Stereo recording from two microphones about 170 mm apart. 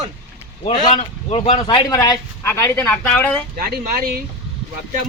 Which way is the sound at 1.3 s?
35° left (ahead or behind).